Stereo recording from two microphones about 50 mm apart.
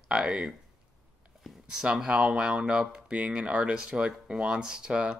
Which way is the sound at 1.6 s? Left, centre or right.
Centre.